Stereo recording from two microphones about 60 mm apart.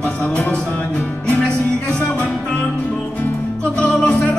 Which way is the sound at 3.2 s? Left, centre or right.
Centre.